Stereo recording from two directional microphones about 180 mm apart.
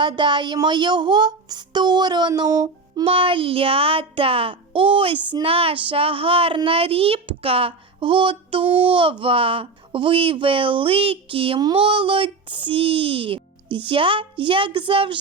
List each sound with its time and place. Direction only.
0.0 s speech: 25° right (ahead or behind)